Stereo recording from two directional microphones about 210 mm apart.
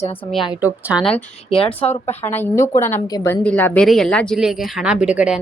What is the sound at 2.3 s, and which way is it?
A woman's voice, 10° left (ahead or behind).